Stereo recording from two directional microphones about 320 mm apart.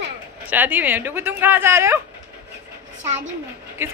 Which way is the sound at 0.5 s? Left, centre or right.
Centre.